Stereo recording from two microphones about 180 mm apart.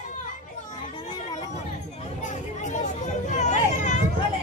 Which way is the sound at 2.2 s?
45° left (ahead or behind).